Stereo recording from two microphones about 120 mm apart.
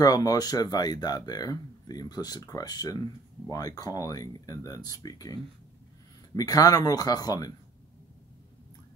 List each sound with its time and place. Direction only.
0.0 s speech: 30° left (ahead or behind)